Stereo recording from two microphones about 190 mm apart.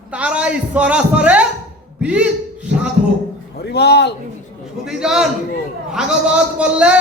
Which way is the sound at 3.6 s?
60° left (ahead or behind).